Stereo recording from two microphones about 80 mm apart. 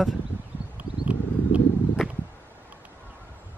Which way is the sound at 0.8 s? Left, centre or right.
Centre.